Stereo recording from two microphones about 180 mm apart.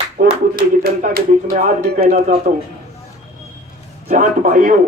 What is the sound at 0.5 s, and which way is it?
Speech, 60° right (ahead or behind).